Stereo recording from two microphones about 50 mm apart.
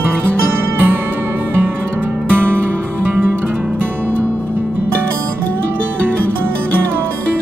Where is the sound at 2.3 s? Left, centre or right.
Right.